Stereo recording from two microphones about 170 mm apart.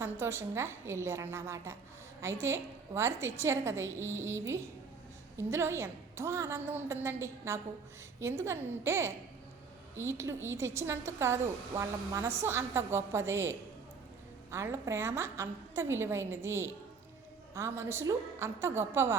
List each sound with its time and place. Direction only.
0.0 s a woman's voice: 15° right (ahead or behind)